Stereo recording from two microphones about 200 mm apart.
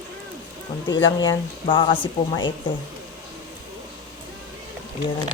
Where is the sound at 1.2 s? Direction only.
20° left (ahead or behind).